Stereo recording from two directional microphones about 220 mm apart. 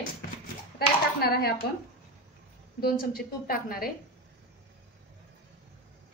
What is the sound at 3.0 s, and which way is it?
Speech, 40° left (ahead or behind).